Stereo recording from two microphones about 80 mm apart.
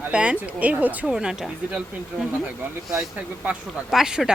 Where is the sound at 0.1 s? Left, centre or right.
Centre.